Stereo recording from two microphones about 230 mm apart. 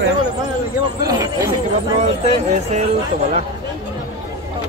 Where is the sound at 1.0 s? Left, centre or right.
Centre.